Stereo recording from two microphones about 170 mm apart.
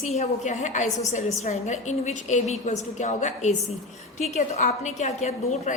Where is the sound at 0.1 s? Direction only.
40° left (ahead or behind).